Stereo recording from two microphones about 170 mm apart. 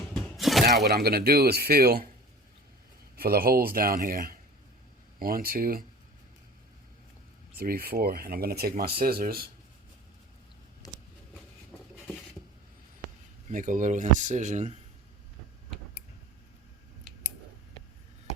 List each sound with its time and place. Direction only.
0.1 s a sound: centre (ahead or behind)
0.8 s speech: 70° right (ahead or behind)
3.2 s speech: 60° right (ahead or behind)
7.6 s speech: 60° right (ahead or behind)
10.8 s a sound: 20° left (ahead or behind)
13.5 s speech: 50° right (ahead or behind)